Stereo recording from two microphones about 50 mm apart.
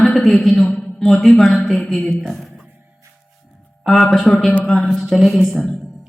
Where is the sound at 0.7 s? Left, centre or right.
Centre.